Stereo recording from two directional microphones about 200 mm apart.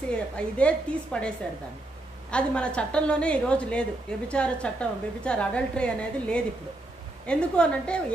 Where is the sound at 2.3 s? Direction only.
5° left (ahead or behind).